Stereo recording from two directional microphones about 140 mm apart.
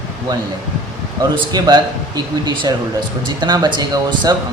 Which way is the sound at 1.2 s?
25° right (ahead or behind).